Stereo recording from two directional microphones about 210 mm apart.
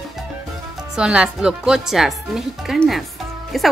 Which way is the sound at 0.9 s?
5° right (ahead or behind).